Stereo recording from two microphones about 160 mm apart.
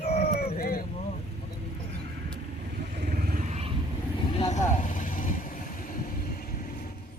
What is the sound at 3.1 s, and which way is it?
Vehicle, 60° right (ahead or behind).